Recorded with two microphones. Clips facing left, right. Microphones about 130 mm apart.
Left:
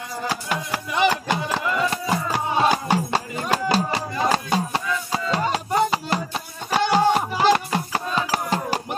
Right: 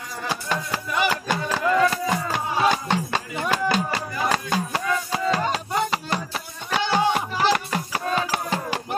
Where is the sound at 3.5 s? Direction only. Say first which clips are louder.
Left 2 dB; 35° left (ahead or behind).